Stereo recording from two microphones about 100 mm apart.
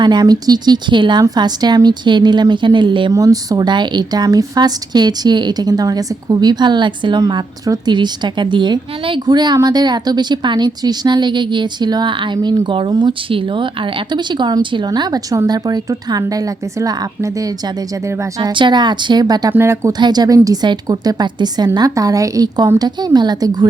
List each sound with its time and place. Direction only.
0.0 s speech: 45° right (ahead or behind)
3.1 s a woman's voice: 35° right (ahead or behind)
18.5 s speech: 50° right (ahead or behind)
19.5 s speech: 25° right (ahead or behind)
19.9 s a woman's voice: 45° right (ahead or behind)